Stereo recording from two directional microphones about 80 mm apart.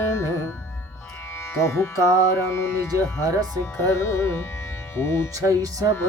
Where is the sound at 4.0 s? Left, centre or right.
Left.